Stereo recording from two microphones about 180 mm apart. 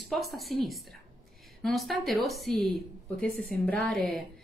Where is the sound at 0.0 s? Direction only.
Centre (ahead or behind).